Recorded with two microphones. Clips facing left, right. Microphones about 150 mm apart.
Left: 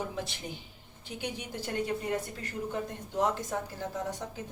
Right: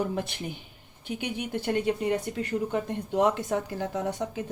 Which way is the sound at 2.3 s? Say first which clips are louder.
Right 8 dB; 75° right (ahead or behind).